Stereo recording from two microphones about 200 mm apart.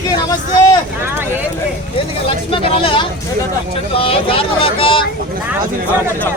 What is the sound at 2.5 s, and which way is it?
Speech, 25° left (ahead or behind).